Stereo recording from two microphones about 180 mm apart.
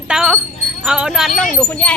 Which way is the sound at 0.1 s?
5° right (ahead or behind).